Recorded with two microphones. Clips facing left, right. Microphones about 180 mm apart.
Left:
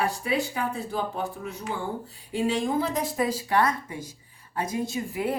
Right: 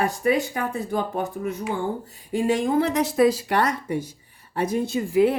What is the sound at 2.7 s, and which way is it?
A woman's voice, 70° right (ahead or behind).